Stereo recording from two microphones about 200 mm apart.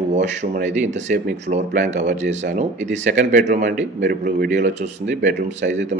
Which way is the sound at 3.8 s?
55° right (ahead or behind).